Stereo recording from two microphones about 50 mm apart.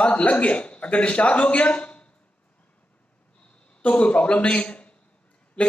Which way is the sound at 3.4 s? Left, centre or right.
Left.